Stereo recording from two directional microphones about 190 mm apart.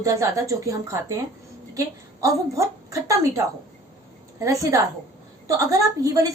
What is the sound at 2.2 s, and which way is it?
A woman's voice, 15° right (ahead or behind).